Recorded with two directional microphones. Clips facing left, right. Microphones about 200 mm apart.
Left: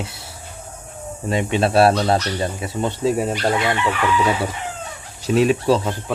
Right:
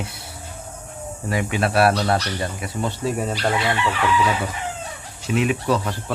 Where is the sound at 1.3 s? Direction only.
25° left (ahead or behind).